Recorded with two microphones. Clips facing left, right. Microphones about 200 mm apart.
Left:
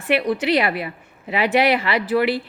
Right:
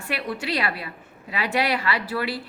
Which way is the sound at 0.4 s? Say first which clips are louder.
Left 8 dB; 20° left (ahead or behind).